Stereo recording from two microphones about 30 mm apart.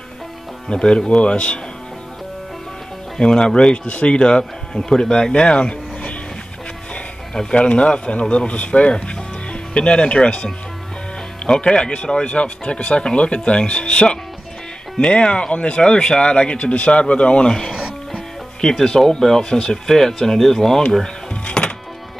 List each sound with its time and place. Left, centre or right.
0.8 s speech: left
3.2 s speech: left
7.5 s speech: left
17.5 s speech: left
21.5 s music: left